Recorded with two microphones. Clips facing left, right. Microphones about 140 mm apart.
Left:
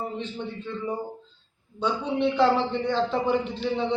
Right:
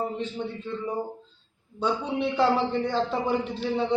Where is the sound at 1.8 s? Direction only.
5° right (ahead or behind).